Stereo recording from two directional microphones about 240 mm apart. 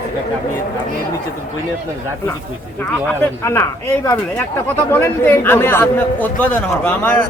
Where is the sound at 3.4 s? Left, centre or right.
Centre.